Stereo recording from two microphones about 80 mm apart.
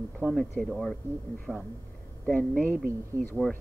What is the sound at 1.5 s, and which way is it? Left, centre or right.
Speech, centre.